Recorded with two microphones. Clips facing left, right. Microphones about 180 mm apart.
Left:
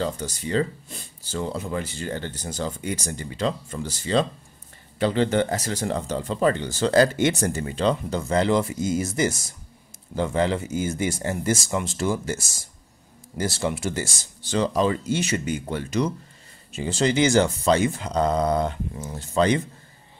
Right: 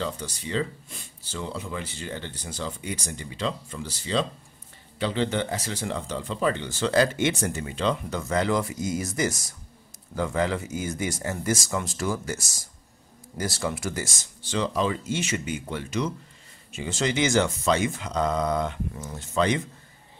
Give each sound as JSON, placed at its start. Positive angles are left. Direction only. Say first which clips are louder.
{"t": 0.0, "sound": "speech", "louder": "left 4 dB", "side_deg": 40}